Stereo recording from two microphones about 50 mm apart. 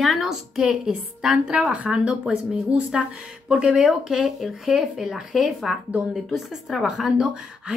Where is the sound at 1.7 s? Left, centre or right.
Right.